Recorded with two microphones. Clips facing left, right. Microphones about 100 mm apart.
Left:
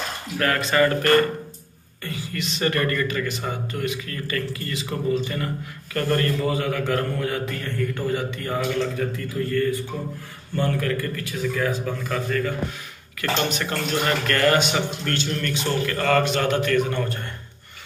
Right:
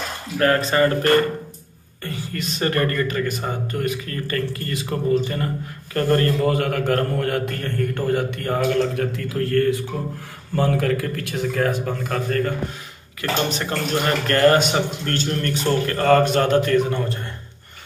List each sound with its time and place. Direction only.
0.4 s speech: 35° right (ahead or behind)
2.0 s speech: 40° right (ahead or behind)
6.4 s a man's voice: 55° right (ahead or behind); by 9.8 s 75° right (ahead or behind)
10.5 s a man's voice: 90° right; by 12.5 s 50° right (ahead or behind)
13.5 s speech: 30° right (ahead or behind)